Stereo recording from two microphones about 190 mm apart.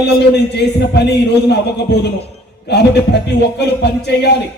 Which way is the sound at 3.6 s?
60° left (ahead or behind).